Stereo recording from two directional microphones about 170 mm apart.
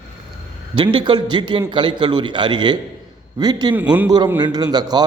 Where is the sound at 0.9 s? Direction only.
25° right (ahead or behind).